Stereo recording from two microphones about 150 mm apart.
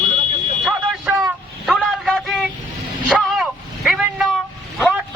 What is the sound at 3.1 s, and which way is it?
Vehicle, centre (ahead or behind).